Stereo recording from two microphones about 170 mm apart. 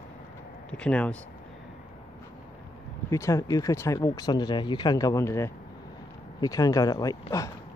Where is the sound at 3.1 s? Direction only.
20° left (ahead or behind).